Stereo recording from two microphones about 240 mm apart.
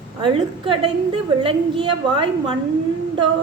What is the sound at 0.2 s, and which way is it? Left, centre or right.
A woman's voice, right.